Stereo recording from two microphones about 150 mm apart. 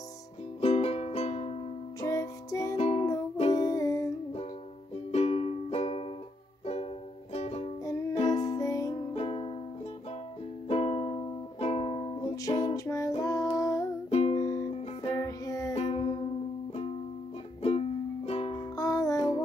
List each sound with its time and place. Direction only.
0.6 s music: 40° left (ahead or behind)
2.0 s music: 20° left (ahead or behind)
2.8 s music: 45° left (ahead or behind)
3.5 s music: 20° left (ahead or behind)
5.1 s music: 45° left (ahead or behind)
8.3 s music: 25° left (ahead or behind)
9.1 s music: 40° left (ahead or behind)
10.7 s music: 40° left (ahead or behind); by 13.8 s 20° left (ahead or behind)
14.1 s music: 45° left (ahead or behind)
15.1 s music: 20° left (ahead or behind)
15.7 s music: 40° left (ahead or behind)
17.6 s music: 45° left (ahead or behind)
18.8 s music: 20° left (ahead or behind)